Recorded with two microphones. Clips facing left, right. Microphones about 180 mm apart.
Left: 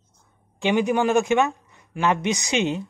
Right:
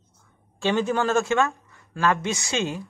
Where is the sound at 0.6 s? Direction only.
15° left (ahead or behind).